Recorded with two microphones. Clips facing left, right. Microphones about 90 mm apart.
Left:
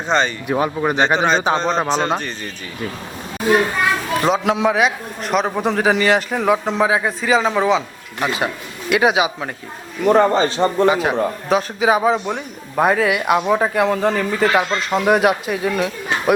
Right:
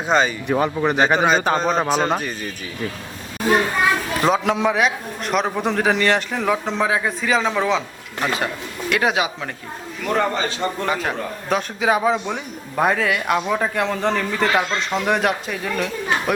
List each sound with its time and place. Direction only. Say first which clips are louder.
0.1 s a man's voice: even; 5° right (ahead or behind)
0.4 s a man's voice: left 1 dB; 5° left (ahead or behind)
4.4 s a man's voice: left 2 dB; centre (ahead or behind)
10.0 s a man's voice: left 7 dB; 30° left (ahead or behind)
10.8 s a man's voice: left 7 dB; 10° left (ahead or behind)